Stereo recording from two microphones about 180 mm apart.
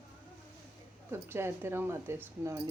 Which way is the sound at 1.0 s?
15° right (ahead or behind).